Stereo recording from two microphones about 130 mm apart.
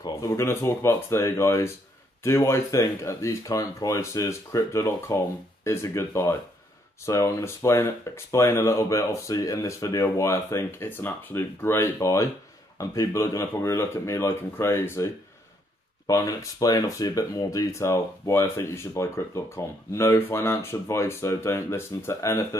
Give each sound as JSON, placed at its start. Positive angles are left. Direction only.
{"t": 0.0, "sound": "speech", "side_deg": 25}
{"t": 16.1, "sound": "speech", "side_deg": 25}